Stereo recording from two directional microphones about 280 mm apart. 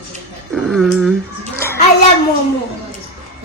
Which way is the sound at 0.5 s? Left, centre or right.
Centre.